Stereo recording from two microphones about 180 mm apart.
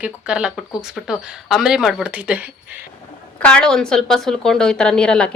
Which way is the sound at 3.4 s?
5° left (ahead or behind).